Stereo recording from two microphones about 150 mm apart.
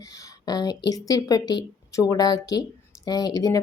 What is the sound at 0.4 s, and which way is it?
A woman's voice, 25° left (ahead or behind).